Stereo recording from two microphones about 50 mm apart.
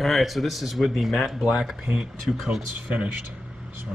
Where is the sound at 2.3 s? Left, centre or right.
Left.